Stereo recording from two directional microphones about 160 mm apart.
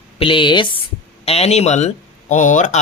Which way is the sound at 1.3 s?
40° left (ahead or behind).